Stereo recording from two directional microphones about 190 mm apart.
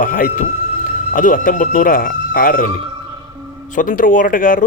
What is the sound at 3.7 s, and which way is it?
Speech, 45° left (ahead or behind).